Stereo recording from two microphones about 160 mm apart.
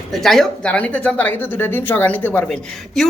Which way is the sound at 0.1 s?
Centre (ahead or behind).